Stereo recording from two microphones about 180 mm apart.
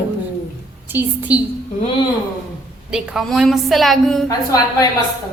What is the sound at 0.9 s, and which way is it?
Speech, 10° right (ahead or behind).